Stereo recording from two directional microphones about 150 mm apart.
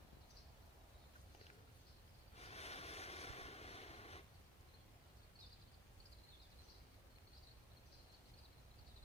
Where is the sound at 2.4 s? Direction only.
45° left (ahead or behind).